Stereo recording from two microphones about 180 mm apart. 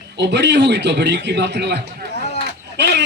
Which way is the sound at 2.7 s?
70° right (ahead or behind).